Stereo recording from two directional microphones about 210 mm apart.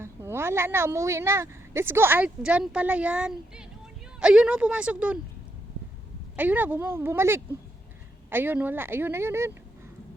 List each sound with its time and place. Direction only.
0.0 s speech: 10° right (ahead or behind)
6.3 s speech: 10° right (ahead or behind)